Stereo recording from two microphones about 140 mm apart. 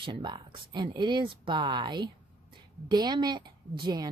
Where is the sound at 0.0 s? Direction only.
35° right (ahead or behind).